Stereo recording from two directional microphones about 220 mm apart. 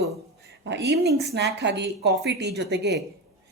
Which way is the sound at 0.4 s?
50° right (ahead or behind).